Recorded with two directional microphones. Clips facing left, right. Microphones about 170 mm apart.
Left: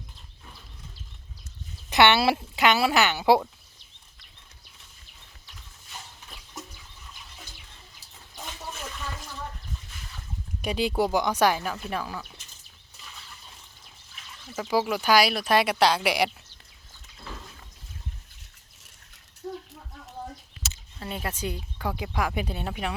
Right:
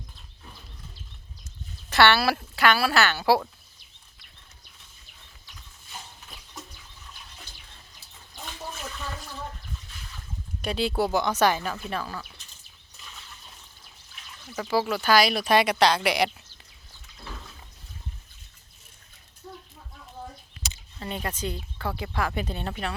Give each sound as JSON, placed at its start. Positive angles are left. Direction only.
{"t": 1.9, "sound": "speech", "side_deg": 20}
{"t": 10.6, "sound": "speech", "side_deg": 15}
{"t": 14.5, "sound": "speech", "side_deg": 10}
{"t": 15.3, "sound": "speech", "side_deg": 0}
{"t": 20.6, "sound": "speech", "side_deg": 5}